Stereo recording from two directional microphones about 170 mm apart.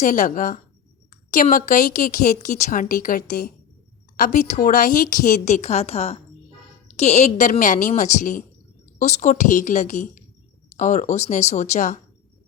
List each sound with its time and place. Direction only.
0.0 s a woman's voice: 50° left (ahead or behind)